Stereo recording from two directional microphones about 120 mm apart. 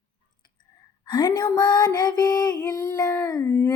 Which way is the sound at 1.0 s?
35° left (ahead or behind).